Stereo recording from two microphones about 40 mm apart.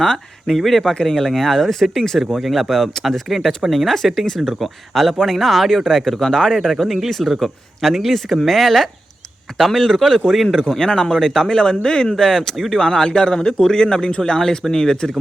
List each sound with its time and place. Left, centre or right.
0.0 s a man's voice: centre
10.6 s a man's voice: centre